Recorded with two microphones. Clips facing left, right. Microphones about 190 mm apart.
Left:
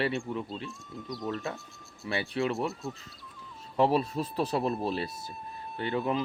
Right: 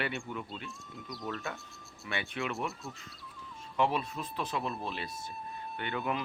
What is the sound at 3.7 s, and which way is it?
Speech, 35° left (ahead or behind).